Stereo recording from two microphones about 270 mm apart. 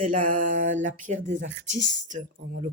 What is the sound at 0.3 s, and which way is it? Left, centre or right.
Speech, right.